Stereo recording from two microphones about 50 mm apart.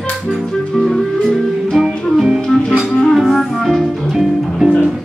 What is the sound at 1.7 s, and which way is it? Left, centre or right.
Music, centre.